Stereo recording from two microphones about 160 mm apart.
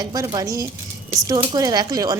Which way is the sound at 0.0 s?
25° right (ahead or behind).